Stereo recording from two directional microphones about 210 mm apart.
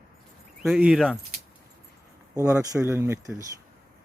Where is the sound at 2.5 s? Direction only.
10° right (ahead or behind).